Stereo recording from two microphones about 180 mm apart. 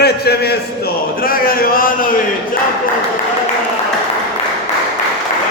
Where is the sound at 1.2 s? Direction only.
55° left (ahead or behind).